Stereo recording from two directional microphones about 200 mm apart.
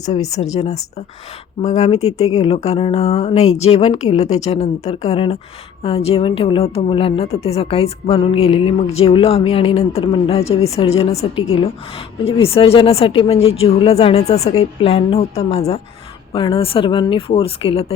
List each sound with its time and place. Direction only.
0.4 s a woman's voice: 30° left (ahead or behind)
1.6 s a woman's voice: 35° left (ahead or behind)